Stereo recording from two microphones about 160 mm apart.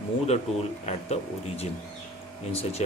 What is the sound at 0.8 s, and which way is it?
A man's voice, 40° left (ahead or behind).